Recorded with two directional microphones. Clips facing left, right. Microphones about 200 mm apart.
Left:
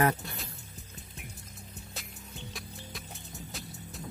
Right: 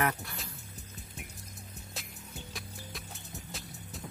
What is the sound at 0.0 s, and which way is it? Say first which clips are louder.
Speech: left 4 dB; 25° left (ahead or behind).